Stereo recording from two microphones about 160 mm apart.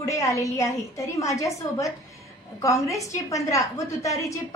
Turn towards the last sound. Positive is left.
turn(degrees=20)  # may be behind; listen again after turning